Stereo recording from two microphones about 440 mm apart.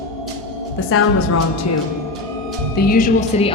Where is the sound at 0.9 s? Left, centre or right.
Left.